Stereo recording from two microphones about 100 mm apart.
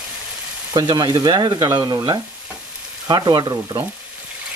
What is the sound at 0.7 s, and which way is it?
Frying, 40° right (ahead or behind).